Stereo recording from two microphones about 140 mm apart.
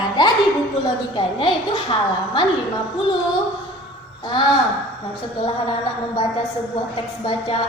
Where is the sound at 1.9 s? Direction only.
35° left (ahead or behind).